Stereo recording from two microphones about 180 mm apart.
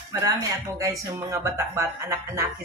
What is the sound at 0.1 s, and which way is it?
Speech, 20° right (ahead or behind).